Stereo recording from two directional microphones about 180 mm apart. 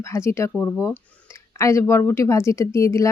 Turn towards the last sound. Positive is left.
turn(degrees=15)  # may be behind; listen again after turning